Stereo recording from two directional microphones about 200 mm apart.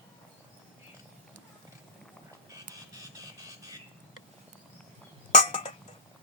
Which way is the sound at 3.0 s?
15° right (ahead or behind).